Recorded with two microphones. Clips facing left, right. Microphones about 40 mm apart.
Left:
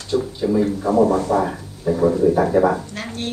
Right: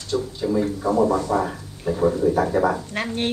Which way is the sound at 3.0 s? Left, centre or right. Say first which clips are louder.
Right 4 dB; right.